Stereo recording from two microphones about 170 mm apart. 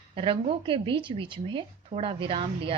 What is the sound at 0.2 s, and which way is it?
Speech, 35° right (ahead or behind).